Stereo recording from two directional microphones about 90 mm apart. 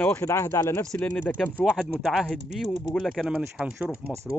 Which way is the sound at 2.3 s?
Centre (ahead or behind).